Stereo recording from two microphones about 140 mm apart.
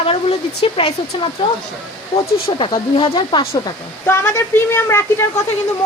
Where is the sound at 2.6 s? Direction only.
40° left (ahead or behind).